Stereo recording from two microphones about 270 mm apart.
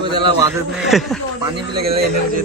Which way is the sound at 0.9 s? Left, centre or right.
Centre.